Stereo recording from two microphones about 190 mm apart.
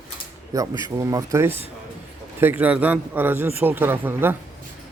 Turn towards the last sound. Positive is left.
turn(degrees=-10)  # may be behind; listen again after turning